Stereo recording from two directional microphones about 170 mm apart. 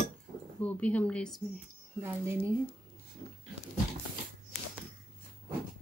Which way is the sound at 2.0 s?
15° right (ahead or behind).